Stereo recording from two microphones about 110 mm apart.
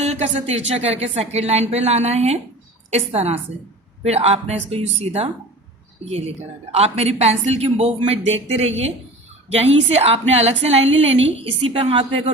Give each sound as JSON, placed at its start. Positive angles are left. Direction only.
{"t": 0.0, "sound": "a woman's voice", "side_deg": -85}